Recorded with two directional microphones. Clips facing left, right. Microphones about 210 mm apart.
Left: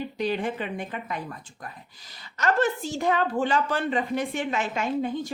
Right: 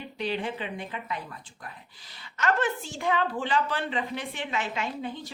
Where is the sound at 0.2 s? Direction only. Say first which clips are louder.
Left 3 dB; 45° left (ahead or behind).